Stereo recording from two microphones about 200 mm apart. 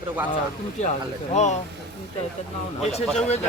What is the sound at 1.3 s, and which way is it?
Speech, 35° left (ahead or behind).